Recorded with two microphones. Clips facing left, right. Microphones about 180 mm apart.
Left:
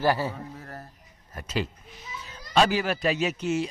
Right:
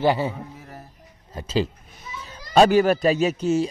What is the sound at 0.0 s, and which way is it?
Speech, 20° right (ahead or behind).